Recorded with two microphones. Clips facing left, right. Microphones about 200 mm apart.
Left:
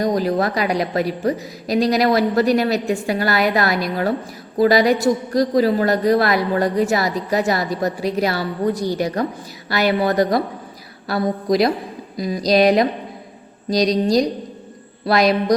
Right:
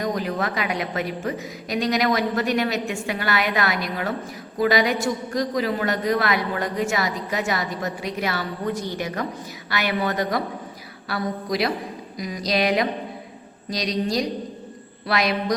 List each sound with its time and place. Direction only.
0.0 s a woman's voice: 35° left (ahead or behind)